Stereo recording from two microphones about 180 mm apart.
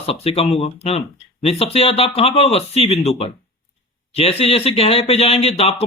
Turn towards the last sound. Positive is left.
turn(degrees=35)  # may be behind; listen again after turning